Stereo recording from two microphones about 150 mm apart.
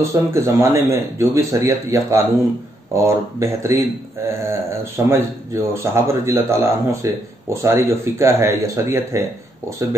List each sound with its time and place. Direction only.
0.0 s speech: 20° right (ahead or behind)